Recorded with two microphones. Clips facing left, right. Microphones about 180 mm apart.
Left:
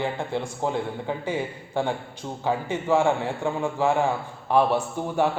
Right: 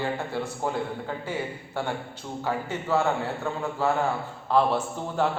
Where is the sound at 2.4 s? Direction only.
15° left (ahead or behind).